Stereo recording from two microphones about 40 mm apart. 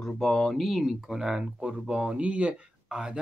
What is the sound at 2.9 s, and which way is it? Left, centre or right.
Speech, right.